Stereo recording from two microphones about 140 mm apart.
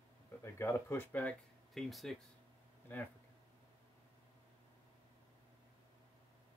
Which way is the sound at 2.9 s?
15° left (ahead or behind).